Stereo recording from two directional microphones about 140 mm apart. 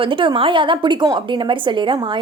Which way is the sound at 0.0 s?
35° right (ahead or behind).